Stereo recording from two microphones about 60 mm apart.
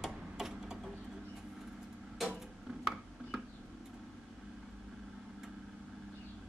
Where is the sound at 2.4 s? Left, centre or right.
Centre.